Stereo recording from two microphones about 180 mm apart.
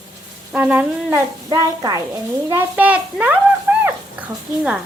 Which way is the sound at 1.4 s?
20° right (ahead or behind).